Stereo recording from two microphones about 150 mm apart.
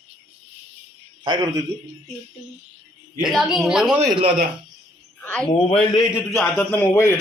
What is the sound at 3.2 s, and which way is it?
Speech, centre (ahead or behind).